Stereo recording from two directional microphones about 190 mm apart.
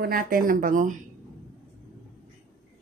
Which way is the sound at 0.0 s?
50° right (ahead or behind).